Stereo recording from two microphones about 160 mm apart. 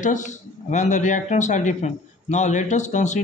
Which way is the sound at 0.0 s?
50° left (ahead or behind).